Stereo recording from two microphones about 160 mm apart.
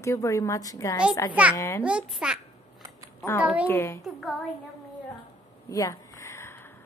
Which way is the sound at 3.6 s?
15° left (ahead or behind).